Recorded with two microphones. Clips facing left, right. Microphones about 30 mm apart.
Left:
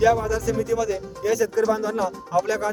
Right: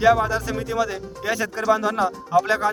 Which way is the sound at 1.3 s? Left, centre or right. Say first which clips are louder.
Left 4 dB; right.